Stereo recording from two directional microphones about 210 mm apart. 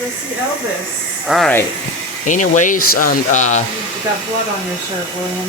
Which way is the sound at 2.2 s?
35° left (ahead or behind).